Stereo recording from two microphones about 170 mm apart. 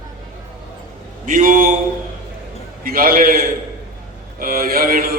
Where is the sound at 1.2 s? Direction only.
50° right (ahead or behind).